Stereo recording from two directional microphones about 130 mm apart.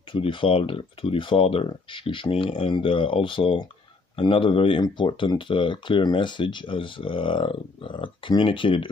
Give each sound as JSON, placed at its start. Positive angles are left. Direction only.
{"t": 0.1, "sound": "speech", "side_deg": 40}